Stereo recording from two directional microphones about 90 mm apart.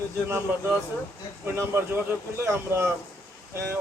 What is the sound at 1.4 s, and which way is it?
Speech, 25° right (ahead or behind).